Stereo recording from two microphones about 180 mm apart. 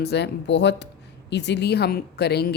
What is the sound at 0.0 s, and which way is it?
A woman's voice, 70° left (ahead or behind).